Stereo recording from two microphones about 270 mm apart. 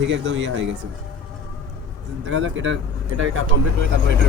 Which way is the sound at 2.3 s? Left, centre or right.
Right.